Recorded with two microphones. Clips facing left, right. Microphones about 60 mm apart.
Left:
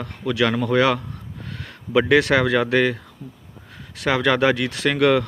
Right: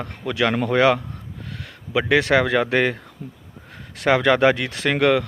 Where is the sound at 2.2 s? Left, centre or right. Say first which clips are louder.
Even; right.